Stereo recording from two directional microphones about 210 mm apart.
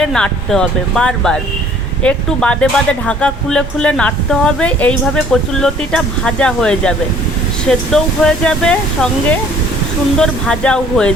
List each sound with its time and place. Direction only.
0.0 s speech: 5° left (ahead or behind)
10.2 s speech: 5° left (ahead or behind)